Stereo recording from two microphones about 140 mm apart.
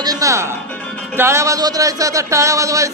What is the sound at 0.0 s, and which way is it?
Music, 25° right (ahead or behind).